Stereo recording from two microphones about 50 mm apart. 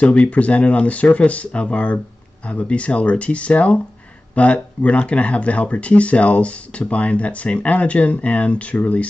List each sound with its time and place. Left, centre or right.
0.0 s speech: left